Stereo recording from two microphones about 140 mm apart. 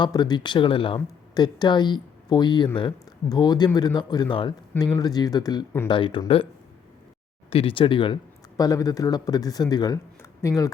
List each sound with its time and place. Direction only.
0.0 s speech: 30° left (ahead or behind)
7.5 s speech: 40° left (ahead or behind)
8.5 s speech: 25° left (ahead or behind)